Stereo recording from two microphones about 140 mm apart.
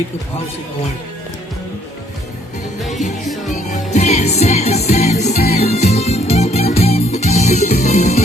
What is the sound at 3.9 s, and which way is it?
Music, 55° left (ahead or behind).